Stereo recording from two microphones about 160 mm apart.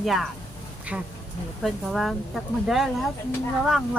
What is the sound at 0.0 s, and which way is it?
Speech, centre (ahead or behind).